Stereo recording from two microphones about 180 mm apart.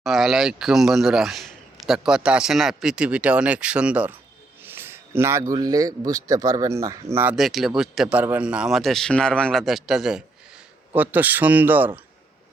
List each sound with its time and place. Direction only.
0.0 s a man's voice: centre (ahead or behind)
7.3 s speech: centre (ahead or behind)